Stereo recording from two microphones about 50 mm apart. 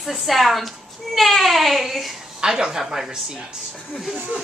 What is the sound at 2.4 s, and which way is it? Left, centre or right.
A woman's voice, centre.